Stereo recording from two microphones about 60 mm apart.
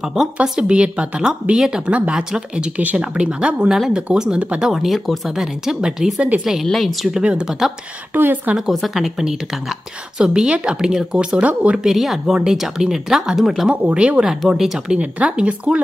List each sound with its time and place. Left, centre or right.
0.1 s a woman's voice: centre
3.7 s a woman's voice: centre
4.6 s a woman's voice: centre
6.6 s a woman's voice: centre
7.2 s a woman's voice: centre
8.1 s a woman's voice: right
8.5 s a woman's voice: centre
11.9 s a woman's voice: centre
13.9 s speech: centre
14.2 s a woman's voice: centre
15.0 s speech: right